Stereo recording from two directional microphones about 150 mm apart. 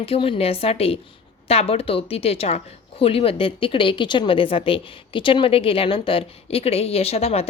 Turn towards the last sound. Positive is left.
turn(degrees=40)  # may be behind; listen again after turning